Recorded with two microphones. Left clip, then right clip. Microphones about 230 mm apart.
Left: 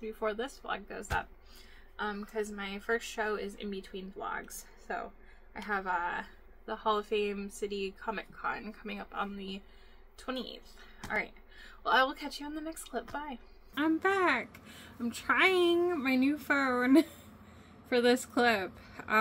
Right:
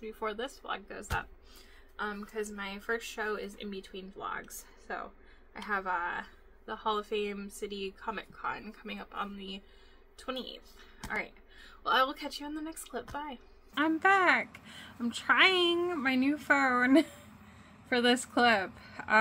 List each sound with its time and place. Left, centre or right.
0.0 s a woman's voice: centre